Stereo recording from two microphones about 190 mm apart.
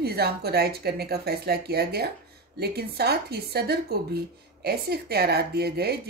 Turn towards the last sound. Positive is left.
turn(degrees=-55)  # may be behind; listen again after turning